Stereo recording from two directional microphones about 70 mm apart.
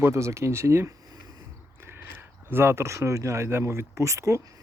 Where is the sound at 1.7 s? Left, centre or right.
Right.